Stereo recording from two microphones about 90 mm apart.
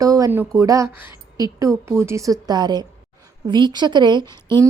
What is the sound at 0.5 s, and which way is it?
A woman's voice, 35° right (ahead or behind).